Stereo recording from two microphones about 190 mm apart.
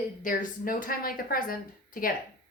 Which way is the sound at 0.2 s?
45° left (ahead or behind).